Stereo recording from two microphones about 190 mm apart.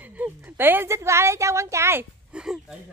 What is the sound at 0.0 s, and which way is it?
A woman's voice, 10° right (ahead or behind).